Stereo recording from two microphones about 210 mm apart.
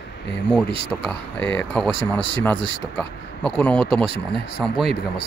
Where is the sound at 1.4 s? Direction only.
10° left (ahead or behind).